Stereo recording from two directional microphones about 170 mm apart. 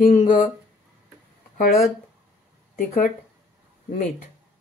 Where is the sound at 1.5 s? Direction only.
55° left (ahead or behind).